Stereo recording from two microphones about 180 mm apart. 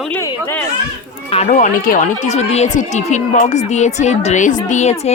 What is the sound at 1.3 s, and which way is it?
Speech, 40° left (ahead or behind).